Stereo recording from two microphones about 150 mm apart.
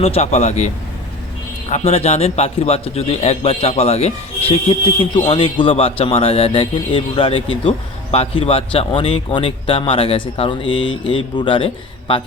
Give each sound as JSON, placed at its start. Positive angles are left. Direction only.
{"t": 0.0, "sound": "speech", "side_deg": 45}
{"t": 1.7, "sound": "a man's voice", "side_deg": 45}